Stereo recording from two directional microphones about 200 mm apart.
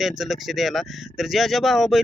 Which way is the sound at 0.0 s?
Centre (ahead or behind).